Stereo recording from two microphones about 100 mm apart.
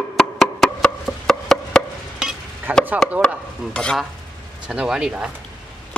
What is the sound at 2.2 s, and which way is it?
Stir, 10° right (ahead or behind).